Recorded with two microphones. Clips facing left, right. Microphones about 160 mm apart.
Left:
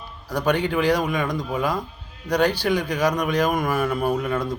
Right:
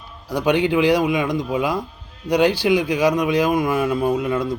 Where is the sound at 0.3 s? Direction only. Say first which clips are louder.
Right 4 dB; 10° right (ahead or behind).